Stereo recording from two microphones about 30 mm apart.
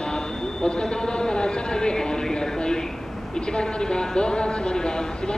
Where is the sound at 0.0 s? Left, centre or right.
Left.